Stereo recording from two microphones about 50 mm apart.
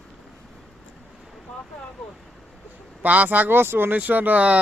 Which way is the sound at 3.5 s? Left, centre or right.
Right.